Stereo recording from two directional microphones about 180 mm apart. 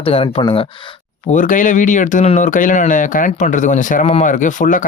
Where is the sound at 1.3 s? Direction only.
45° left (ahead or behind).